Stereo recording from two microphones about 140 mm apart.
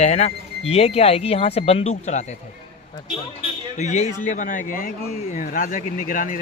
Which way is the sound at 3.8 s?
55° left (ahead or behind).